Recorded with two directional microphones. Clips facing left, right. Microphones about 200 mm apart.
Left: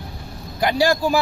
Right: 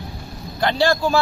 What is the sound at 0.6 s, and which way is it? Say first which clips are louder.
Speech: even; 10° left (ahead or behind).